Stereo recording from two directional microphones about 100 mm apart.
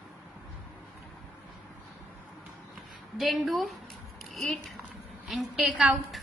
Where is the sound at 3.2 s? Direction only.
Centre (ahead or behind).